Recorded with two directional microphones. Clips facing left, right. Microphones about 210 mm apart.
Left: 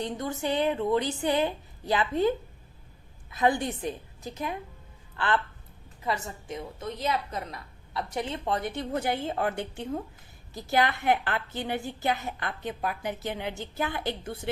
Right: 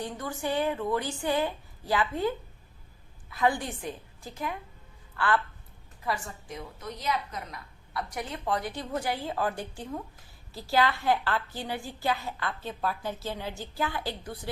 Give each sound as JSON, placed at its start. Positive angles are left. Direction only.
{"t": 0.0, "sound": "a woman's voice", "side_deg": 20}